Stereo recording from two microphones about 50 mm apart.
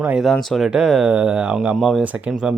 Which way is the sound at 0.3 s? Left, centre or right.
Centre.